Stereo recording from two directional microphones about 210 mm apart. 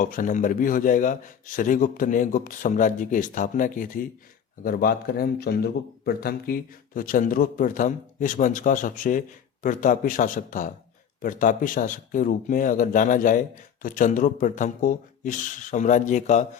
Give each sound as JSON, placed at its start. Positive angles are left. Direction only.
{"t": 0.0, "sound": "speech", "side_deg": 40}